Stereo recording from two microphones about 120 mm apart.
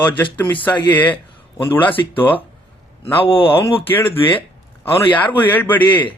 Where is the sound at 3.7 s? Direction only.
15° left (ahead or behind).